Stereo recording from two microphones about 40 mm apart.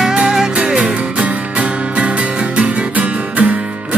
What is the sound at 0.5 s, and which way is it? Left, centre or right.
Music, right.